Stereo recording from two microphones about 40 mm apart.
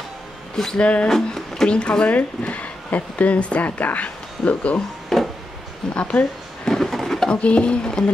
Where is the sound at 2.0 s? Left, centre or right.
Left.